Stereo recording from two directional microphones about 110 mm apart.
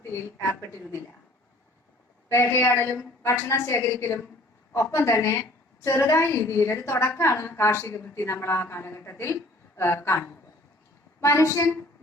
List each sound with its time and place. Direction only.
2.3 s a woman's voice: 25° left (ahead or behind)